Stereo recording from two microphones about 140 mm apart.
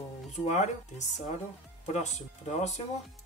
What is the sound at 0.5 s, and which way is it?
Speech, 55° left (ahead or behind).